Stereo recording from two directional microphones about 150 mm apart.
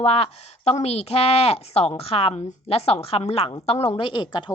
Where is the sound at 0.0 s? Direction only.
40° left (ahead or behind).